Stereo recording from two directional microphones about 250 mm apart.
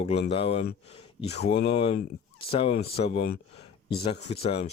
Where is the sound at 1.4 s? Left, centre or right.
Left.